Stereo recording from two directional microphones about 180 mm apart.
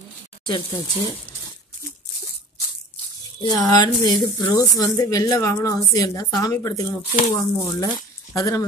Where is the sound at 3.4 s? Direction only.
20° left (ahead or behind).